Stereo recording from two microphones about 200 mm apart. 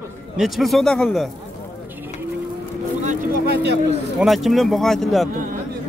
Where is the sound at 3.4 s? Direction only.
55° right (ahead or behind).